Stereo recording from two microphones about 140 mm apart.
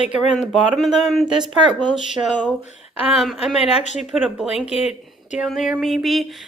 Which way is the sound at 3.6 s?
50° left (ahead or behind).